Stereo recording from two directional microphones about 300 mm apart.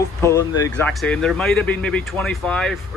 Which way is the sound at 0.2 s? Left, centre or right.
Centre.